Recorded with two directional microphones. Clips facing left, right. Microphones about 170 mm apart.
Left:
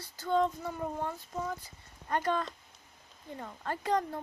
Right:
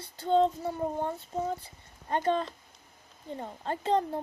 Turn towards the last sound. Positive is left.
turn(degrees=-25)  # may be behind; listen again after turning